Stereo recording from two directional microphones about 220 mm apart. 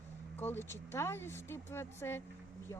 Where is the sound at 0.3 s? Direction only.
10° left (ahead or behind).